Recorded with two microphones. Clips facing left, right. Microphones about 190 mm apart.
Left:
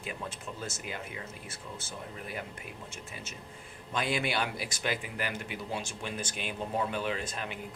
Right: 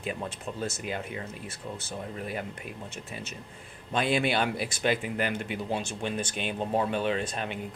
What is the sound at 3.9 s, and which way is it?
Speech, 25° right (ahead or behind).